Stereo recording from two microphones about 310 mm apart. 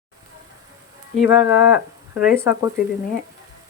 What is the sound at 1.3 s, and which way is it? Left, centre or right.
Speech, centre.